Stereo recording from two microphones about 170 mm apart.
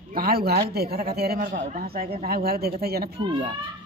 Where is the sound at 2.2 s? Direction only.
60° right (ahead or behind).